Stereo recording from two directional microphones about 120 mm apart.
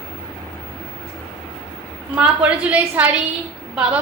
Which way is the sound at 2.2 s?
10° right (ahead or behind).